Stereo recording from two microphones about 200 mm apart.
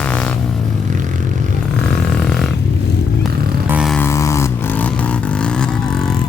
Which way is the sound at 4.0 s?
15° left (ahead or behind).